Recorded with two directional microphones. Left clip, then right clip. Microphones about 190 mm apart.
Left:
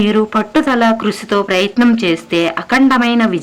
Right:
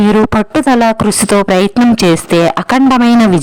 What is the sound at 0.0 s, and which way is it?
Speech, 50° right (ahead or behind).